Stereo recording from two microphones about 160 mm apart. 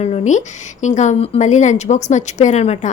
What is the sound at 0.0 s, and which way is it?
A woman's voice, 45° left (ahead or behind).